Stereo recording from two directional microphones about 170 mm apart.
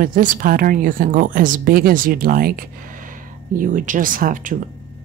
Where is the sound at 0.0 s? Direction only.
50° right (ahead or behind).